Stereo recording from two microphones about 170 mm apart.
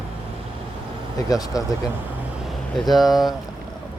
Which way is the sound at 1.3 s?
20° left (ahead or behind).